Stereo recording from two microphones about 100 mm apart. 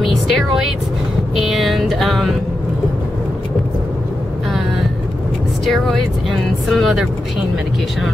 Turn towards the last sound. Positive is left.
turn(degrees=0)  # may be behind; listen again after turning